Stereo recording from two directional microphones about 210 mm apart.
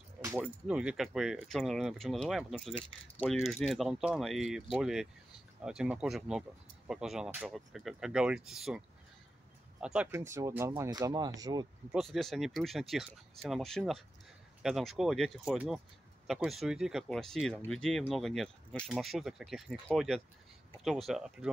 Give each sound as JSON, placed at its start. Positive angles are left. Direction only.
{"t": 0.2, "sound": "speech", "side_deg": -10}
{"t": 11.9, "sound": "speech", "side_deg": 0}